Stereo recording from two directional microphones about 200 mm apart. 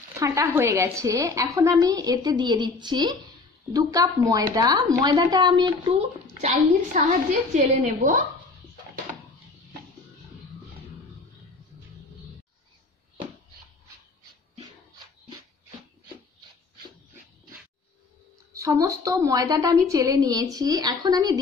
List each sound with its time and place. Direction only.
0.2 s a woman's voice: 15° right (ahead or behind); by 8.3 s 40° right (ahead or behind)
18.5 s a woman's voice: 15° right (ahead or behind)